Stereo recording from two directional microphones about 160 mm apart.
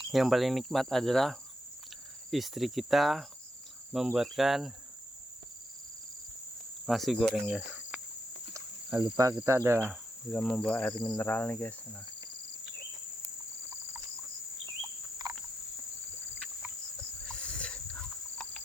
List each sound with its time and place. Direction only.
0.1 s cricket: centre (ahead or behind)
6.8 s cricket: centre (ahead or behind)
9.0 s cricket: 25° right (ahead or behind)
10.3 s cricket: 10° left (ahead or behind)
13.2 s a sound: 15° right (ahead or behind)
15.2 s cricket: 25° right (ahead or behind)
17.2 s a sound: 10° left (ahead or behind)